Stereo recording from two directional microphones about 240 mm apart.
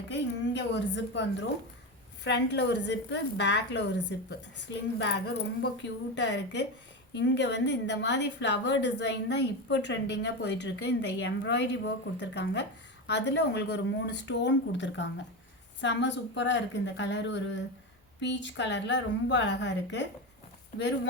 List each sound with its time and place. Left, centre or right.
0.1 s a woman's voice: left